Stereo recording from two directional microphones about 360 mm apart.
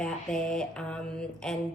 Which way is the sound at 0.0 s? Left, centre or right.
Centre.